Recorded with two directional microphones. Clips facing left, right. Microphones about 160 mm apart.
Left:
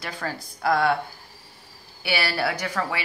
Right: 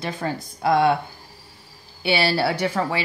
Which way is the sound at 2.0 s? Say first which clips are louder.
Right 5 dB; 25° right (ahead or behind).